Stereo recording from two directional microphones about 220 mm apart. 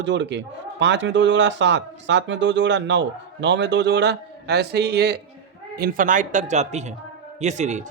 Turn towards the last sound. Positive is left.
turn(degrees=-30)  # may be behind; listen again after turning